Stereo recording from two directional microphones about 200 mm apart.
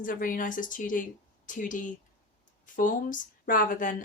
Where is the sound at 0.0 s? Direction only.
40° left (ahead or behind).